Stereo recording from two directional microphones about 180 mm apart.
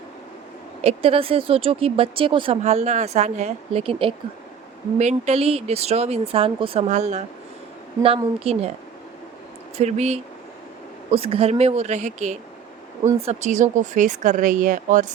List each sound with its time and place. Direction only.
0.9 s speech: 30° right (ahead or behind)
9.7 s speech: 35° right (ahead or behind)